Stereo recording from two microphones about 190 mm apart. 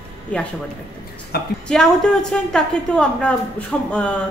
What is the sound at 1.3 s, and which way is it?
Speech, 55° left (ahead or behind).